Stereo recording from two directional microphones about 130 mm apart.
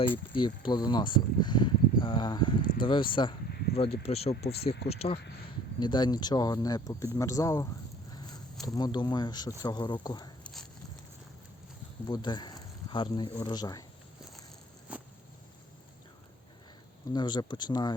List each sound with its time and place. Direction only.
0.1 s speech: 40° left (ahead or behind)
3.8 s speech: 50° left (ahead or behind)
5.8 s speech: 35° left (ahead or behind)
10.4 s a sound: centre (ahead or behind)
12.0 s speech: 35° left (ahead or behind)
14.9 s a sound: 10° right (ahead or behind)
17.1 s speech: 35° left (ahead or behind)